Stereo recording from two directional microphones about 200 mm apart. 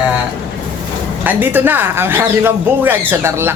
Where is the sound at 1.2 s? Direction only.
10° right (ahead or behind).